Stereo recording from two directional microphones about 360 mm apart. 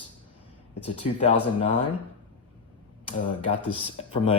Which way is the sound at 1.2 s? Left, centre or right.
Centre.